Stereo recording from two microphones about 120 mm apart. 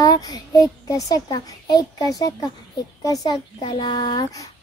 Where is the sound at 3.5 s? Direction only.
45° left (ahead or behind).